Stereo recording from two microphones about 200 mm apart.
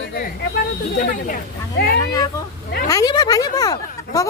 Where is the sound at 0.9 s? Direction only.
45° left (ahead or behind).